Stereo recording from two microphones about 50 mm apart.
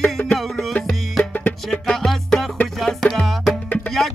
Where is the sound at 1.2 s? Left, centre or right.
Left.